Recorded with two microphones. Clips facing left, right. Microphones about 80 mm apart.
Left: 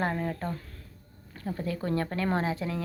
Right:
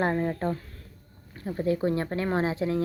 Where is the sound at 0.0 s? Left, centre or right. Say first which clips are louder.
Right 4 dB; right.